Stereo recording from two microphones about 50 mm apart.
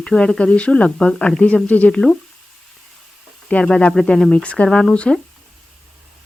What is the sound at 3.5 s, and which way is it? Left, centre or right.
Speech, left.